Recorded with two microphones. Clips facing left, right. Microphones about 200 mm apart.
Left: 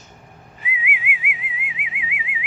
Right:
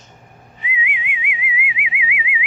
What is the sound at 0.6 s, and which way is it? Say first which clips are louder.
Whistling: right 2 dB; 5° left (ahead or behind).